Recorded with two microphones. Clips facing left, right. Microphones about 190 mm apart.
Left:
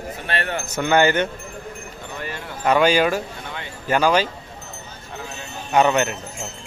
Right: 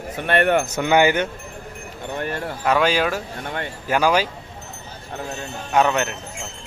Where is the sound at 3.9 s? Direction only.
10° right (ahead or behind).